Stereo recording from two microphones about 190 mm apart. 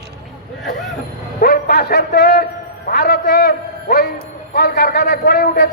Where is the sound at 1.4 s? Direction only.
55° left (ahead or behind).